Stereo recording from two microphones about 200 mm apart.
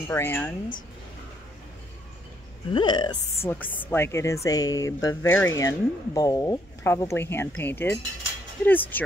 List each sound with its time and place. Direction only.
0.1 s speech: 10° left (ahead or behind)
2.7 s speech: 20° left (ahead or behind)
3.4 s speech: 10° left (ahead or behind)